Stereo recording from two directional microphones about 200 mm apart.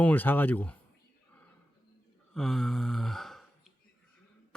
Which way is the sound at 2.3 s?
Centre (ahead or behind).